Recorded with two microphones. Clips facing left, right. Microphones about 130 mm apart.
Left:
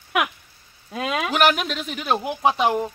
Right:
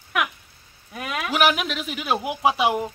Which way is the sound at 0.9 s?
25° left (ahead or behind).